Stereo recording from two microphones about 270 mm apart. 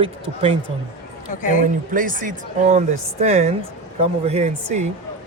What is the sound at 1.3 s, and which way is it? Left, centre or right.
Speech, left.